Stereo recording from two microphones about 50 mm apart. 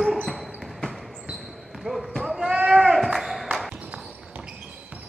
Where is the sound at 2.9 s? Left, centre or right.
Centre.